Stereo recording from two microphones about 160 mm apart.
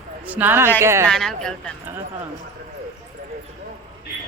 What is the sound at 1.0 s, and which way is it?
Speech, centre (ahead or behind).